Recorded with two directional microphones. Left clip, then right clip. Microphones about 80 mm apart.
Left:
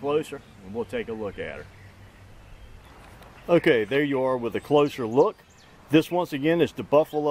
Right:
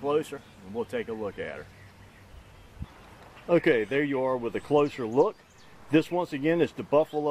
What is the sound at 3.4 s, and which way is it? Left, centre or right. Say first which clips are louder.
Speech: left 3 dB; left.